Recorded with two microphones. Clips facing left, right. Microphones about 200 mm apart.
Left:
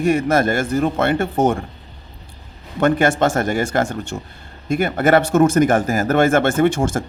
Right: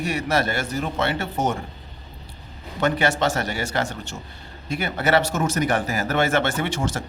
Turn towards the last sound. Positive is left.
turn(degrees=50)  # may be behind; listen again after turning